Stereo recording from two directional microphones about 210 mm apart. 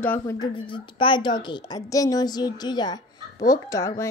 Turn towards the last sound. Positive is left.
turn(degrees=15)  # may be behind; listen again after turning